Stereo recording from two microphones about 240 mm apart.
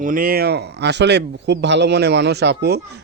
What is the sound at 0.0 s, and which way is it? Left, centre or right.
Speech, right.